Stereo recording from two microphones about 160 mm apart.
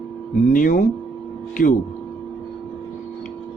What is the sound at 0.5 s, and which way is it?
Speech, 55° left (ahead or behind).